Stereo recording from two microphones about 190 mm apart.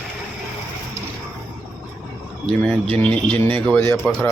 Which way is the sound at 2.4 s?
5° left (ahead or behind).